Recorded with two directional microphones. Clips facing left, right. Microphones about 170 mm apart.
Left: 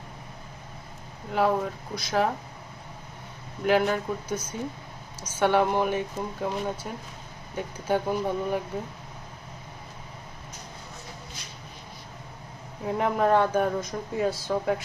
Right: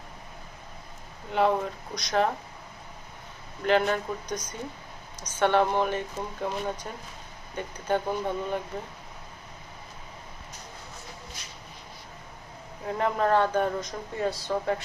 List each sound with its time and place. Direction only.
1.3 s speech: 5° left (ahead or behind)
3.6 s speech: 5° left (ahead or behind)
12.8 s speech: 10° left (ahead or behind)